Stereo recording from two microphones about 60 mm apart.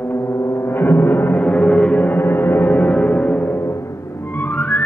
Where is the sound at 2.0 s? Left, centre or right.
Left.